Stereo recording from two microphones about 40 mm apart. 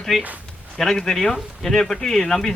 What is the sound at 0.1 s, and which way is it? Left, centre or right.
Speech, centre.